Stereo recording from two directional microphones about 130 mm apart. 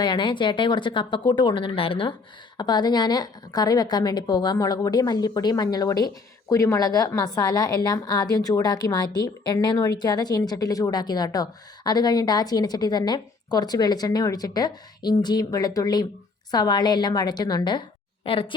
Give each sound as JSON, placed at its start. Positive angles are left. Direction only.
{"t": 0.0, "sound": "a woman's voice", "side_deg": 35}